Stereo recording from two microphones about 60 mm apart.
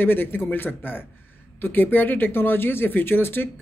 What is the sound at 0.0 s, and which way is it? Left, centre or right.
Speech, left.